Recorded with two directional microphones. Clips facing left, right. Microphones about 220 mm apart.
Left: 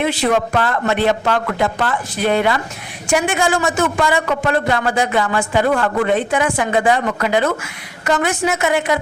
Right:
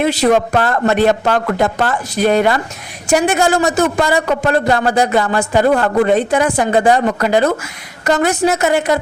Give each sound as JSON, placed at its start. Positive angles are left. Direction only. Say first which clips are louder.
{"t": 0.0, "sound": "a man's voice", "louder": "right 4 dB", "side_deg": -40}